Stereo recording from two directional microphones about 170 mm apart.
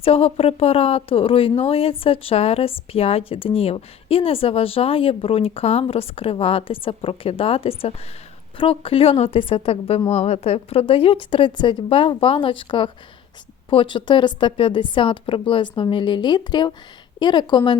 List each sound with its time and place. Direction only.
0.0 s a woman's voice: 35° left (ahead or behind)